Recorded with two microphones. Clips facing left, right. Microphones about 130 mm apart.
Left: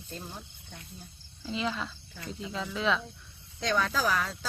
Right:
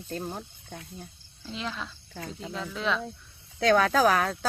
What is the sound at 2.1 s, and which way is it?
Speech, 65° right (ahead or behind).